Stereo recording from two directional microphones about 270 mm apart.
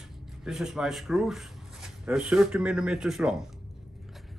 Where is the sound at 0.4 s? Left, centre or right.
Centre.